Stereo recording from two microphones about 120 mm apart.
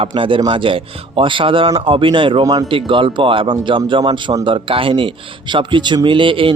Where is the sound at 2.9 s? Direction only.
45° right (ahead or behind).